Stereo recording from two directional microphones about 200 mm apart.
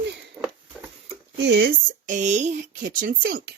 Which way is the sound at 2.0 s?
40° right (ahead or behind).